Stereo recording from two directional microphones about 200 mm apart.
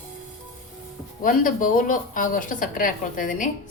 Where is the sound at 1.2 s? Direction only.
40° left (ahead or behind).